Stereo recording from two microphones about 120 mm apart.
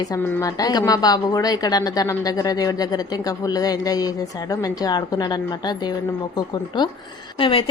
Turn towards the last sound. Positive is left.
turn(degrees=50)  # may be behind; listen again after turning